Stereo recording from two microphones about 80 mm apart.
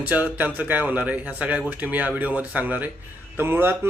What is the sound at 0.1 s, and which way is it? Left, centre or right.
Speech, right.